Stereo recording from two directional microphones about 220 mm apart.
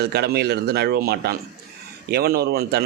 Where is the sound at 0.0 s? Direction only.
50° right (ahead or behind).